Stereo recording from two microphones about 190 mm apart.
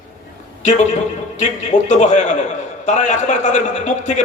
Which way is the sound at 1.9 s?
40° left (ahead or behind).